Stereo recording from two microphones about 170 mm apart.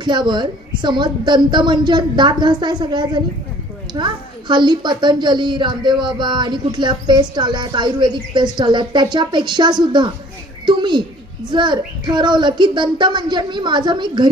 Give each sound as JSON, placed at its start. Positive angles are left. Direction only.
{"t": 0.0, "sound": "a woman's voice", "side_deg": -25}